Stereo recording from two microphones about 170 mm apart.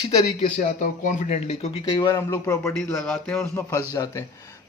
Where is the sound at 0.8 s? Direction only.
50° left (ahead or behind).